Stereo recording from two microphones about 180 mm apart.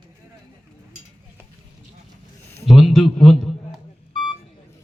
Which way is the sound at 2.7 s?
Centre (ahead or behind).